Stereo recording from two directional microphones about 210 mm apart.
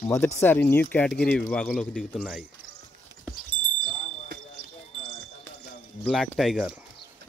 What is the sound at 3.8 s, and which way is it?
Basketball bounce, 35° left (ahead or behind).